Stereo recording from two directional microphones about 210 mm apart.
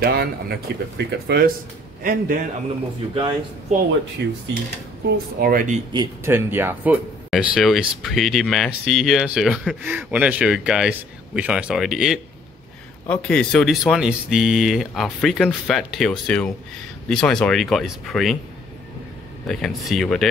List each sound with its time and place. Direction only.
0.0 s a man's voice: 50° right (ahead or behind)
4.2 s speech: 55° right (ahead or behind)
5.1 s speech: 45° right (ahead or behind)
5.9 s speech: 10° right (ahead or behind)
19.4 s speech: centre (ahead or behind)